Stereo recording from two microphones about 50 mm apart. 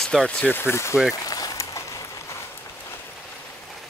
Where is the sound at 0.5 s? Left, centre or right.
Left.